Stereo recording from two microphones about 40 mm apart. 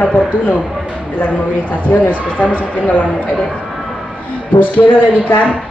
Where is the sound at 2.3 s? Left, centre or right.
Left.